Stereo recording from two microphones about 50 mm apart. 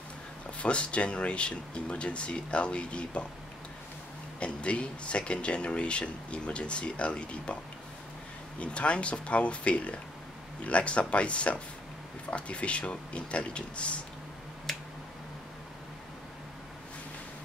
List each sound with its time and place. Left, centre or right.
0.6 s speech: left
4.4 s speech: left
8.5 s speech: left